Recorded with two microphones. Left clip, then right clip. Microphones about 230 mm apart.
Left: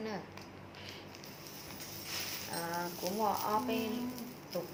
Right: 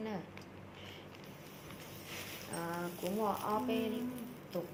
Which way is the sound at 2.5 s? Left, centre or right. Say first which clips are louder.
Left 1 dB; centre.